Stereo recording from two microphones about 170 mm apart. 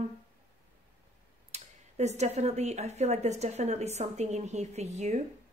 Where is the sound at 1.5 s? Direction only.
40° right (ahead or behind).